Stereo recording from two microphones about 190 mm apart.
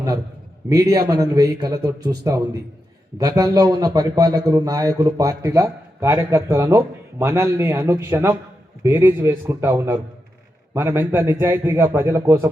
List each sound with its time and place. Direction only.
0.7 s a man's voice: 20° right (ahead or behind)